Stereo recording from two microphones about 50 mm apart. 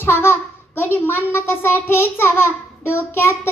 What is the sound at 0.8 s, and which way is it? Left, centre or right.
A child's voice, left.